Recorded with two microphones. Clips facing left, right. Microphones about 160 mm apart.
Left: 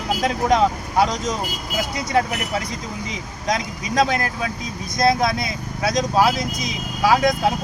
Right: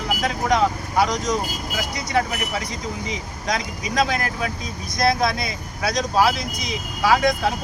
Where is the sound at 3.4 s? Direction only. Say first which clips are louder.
Left 2 dB; 20° left (ahead or behind).